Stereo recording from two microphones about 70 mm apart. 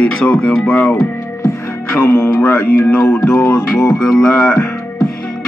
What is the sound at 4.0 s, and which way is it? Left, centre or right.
Music, centre.